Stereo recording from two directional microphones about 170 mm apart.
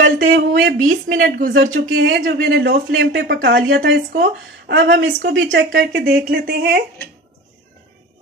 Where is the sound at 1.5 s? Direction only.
85° right.